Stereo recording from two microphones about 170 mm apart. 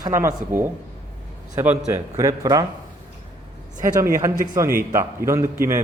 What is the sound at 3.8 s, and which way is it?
A man's voice, 15° right (ahead or behind).